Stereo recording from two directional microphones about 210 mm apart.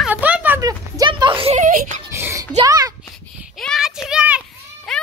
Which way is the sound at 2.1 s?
10° right (ahead or behind).